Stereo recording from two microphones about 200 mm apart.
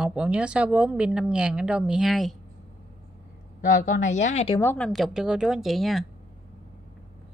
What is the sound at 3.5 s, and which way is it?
A woman's voice, 40° left (ahead or behind).